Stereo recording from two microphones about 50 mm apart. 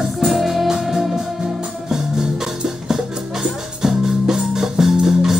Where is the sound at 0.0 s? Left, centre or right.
Centre.